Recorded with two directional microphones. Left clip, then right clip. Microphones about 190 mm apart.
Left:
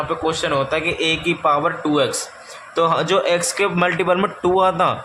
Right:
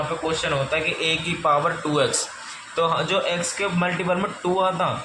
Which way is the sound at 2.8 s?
35° left (ahead or behind).